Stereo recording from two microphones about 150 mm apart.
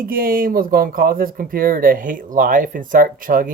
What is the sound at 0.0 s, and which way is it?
Speech, 75° right (ahead or behind).